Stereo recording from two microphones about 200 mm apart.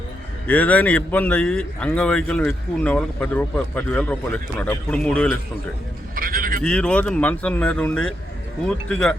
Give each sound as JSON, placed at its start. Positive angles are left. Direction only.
{"t": 0.4, "sound": "a man's voice", "side_deg": 5}
{"t": 6.1, "sound": "vehicle", "side_deg": -45}
{"t": 6.6, "sound": "speech", "side_deg": 5}